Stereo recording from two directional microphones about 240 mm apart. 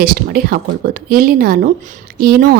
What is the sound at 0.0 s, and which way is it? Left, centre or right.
A woman's voice, right.